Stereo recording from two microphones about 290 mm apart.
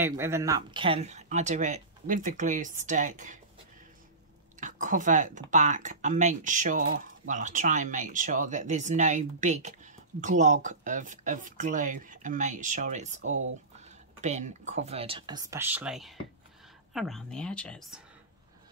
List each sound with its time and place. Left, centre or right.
0.0 s speech: centre; by 3.3 s right
4.6 s speech: right
13.2 s speech: right
13.7 s a sound: right
14.7 s speech: right; by 18.0 s centre